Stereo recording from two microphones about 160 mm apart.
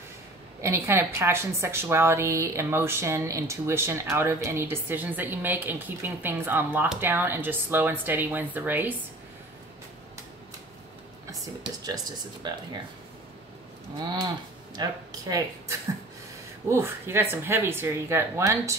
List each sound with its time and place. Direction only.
0.6 s a woman's voice: 15° right (ahead or behind)
11.6 s speech: 25° right (ahead or behind)
14.8 s speech: 20° right (ahead or behind)
16.6 s a woman's voice: 15° right (ahead or behind)